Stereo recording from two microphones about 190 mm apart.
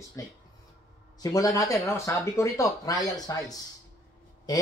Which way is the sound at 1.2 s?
20° left (ahead or behind).